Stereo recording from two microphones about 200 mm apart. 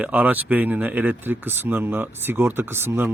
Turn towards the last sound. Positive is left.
turn(degrees=-10)  # may be behind; listen again after turning